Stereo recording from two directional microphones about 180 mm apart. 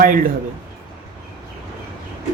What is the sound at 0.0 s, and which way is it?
Speech, 50° right (ahead or behind).